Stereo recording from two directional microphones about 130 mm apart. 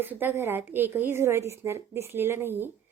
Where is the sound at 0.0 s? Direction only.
15° right (ahead or behind).